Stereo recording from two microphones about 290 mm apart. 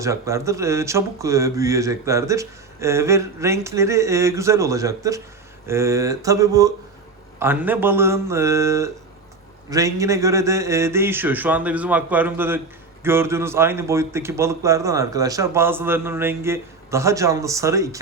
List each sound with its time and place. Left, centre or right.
0.0 s speech: centre